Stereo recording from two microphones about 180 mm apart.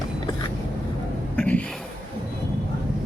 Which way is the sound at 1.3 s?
10° left (ahead or behind).